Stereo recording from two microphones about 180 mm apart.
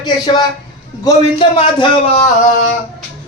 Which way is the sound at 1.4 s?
30° left (ahead or behind).